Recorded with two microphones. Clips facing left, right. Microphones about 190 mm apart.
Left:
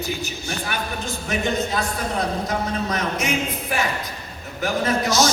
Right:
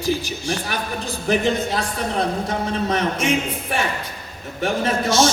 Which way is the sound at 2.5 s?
30° right (ahead or behind).